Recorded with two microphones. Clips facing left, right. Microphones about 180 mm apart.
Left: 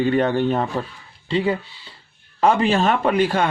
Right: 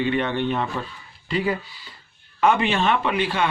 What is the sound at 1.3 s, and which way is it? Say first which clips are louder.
Speech: left 3 dB; 25° left (ahead or behind).